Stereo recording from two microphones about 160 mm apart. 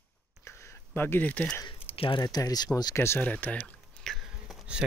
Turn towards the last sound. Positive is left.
turn(degrees=0)  # may be behind; listen again after turning